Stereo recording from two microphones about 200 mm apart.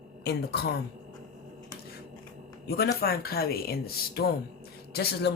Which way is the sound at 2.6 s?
50° left (ahead or behind).